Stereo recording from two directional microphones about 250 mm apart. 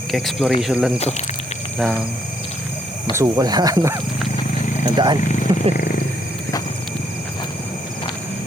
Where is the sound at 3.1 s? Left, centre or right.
Centre.